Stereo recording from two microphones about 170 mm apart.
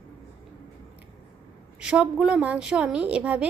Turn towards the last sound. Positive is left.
turn(degrees=-5)  # may be behind; listen again after turning